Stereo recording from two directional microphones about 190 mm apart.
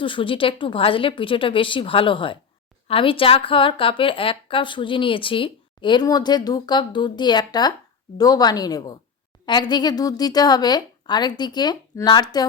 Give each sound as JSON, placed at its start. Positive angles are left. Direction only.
{"t": 0.0, "sound": "a woman's voice", "side_deg": 25}